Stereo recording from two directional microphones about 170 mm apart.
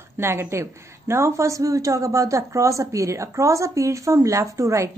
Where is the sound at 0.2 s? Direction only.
15° right (ahead or behind).